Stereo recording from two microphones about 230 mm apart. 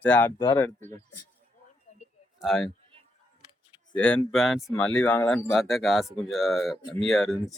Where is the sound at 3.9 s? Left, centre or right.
Centre.